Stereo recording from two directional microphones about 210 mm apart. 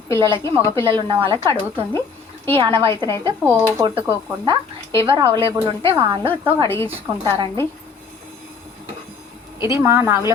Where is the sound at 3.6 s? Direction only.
10° right (ahead or behind).